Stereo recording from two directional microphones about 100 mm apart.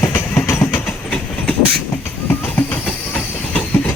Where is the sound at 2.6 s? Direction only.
15° left (ahead or behind).